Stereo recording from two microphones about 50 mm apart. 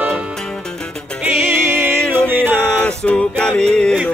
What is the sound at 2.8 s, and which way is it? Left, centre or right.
Music, left.